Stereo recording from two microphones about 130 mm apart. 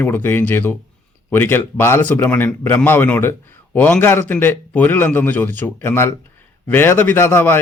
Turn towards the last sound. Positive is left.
turn(degrees=15)  # may be behind; listen again after turning